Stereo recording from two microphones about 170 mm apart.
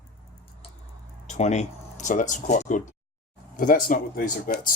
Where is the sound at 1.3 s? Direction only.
45° left (ahead or behind).